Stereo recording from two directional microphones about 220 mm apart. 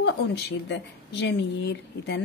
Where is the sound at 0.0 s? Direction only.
55° left (ahead or behind).